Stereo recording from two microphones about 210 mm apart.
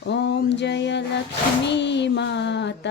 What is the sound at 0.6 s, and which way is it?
Music, 55° left (ahead or behind).